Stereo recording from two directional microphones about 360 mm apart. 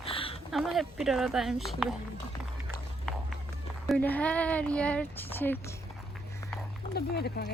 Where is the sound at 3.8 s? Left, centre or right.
Centre.